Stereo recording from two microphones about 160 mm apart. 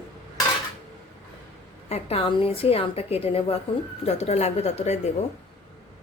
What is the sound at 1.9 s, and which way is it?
A woman's voice, 40° left (ahead or behind).